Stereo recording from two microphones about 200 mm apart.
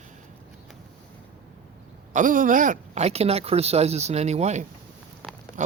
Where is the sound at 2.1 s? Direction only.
40° right (ahead or behind).